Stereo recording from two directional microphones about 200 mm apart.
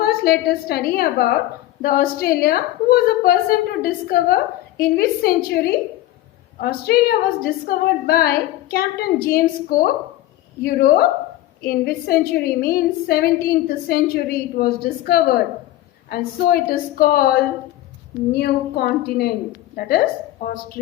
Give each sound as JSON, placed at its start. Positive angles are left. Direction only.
{"t": 0.0, "sound": "a woman's voice", "side_deg": 50}